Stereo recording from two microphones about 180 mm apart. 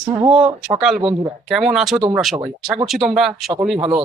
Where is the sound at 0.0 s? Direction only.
25° right (ahead or behind).